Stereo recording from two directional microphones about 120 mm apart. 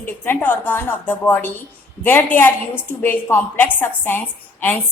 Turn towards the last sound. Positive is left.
turn(degrees=15)  # may be behind; listen again after turning